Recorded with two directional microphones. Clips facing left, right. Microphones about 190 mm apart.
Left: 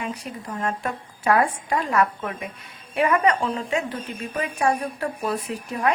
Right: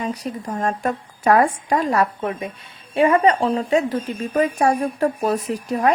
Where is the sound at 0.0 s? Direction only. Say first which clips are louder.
Right 5 dB; 40° right (ahead or behind).